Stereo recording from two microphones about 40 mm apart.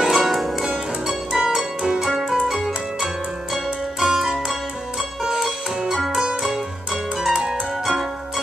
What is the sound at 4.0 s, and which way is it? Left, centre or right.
Music, centre.